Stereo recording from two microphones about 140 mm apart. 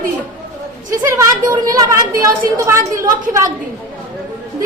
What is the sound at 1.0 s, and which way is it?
A woman's voice, 25° right (ahead or behind).